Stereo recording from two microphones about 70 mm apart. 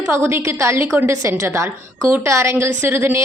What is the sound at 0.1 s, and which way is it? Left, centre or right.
A woman's voice, right.